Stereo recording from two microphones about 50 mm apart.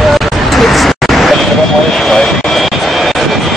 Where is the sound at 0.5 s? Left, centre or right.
Centre.